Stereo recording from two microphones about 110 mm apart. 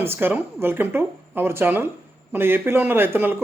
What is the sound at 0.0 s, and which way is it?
Speech, 20° right (ahead or behind).